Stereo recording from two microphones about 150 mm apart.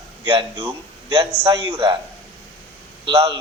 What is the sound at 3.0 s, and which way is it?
Speech, 35° right (ahead or behind).